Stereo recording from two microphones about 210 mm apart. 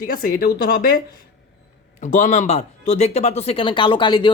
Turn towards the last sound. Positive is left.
turn(degrees=20)  # may be behind; listen again after turning